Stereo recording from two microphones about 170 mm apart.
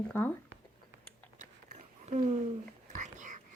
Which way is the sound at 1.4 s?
45° right (ahead or behind).